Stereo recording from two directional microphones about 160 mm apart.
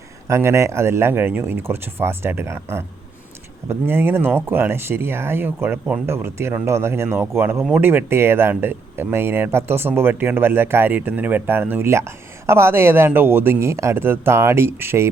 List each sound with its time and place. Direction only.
0.3 s speech: 15° right (ahead or behind)
3.8 s speech: 15° right (ahead or behind)